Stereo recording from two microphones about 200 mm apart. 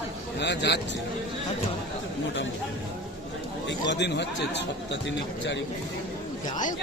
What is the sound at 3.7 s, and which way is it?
Speech, 65° left (ahead or behind).